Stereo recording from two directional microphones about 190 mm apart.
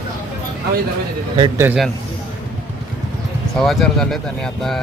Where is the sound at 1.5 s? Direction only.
10° right (ahead or behind).